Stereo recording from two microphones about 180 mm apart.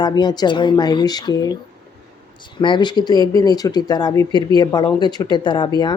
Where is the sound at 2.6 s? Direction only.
25° left (ahead or behind).